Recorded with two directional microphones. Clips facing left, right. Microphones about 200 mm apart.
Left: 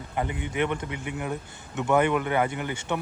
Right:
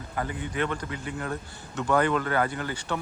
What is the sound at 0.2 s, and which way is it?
A man's voice, 20° left (ahead or behind).